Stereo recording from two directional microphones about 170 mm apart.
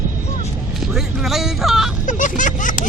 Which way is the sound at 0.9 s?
Centre (ahead or behind).